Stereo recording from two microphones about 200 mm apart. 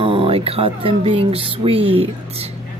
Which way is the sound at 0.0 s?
30° right (ahead or behind).